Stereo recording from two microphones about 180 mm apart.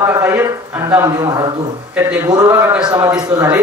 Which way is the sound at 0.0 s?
15° right (ahead or behind).